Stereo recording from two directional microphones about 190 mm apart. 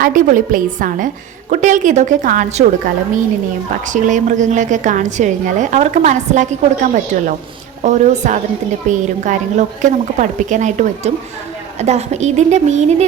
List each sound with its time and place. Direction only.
0.0 s a woman's voice: 45° right (ahead or behind)